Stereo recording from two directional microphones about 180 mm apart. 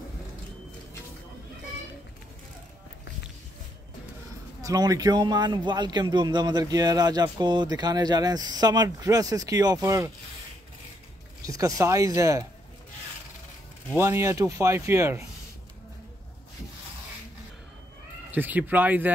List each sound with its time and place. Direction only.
4.6 s a man's voice: 20° right (ahead or behind)
11.4 s speech: 20° right (ahead or behind)
13.9 s speech: 15° right (ahead or behind)
18.3 s speech: 10° right (ahead or behind)